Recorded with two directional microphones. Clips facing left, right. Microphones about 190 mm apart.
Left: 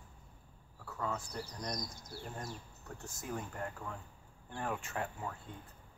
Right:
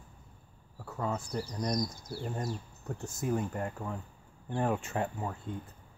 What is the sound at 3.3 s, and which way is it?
Speech, 30° right (ahead or behind).